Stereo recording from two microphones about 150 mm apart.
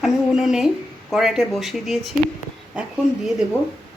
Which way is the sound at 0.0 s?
5° right (ahead or behind).